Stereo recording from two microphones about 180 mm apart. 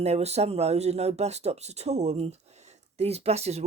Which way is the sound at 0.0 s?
35° right (ahead or behind).